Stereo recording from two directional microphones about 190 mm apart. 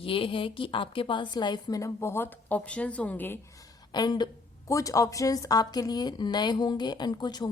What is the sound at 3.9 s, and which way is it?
Speech, 20° left (ahead or behind).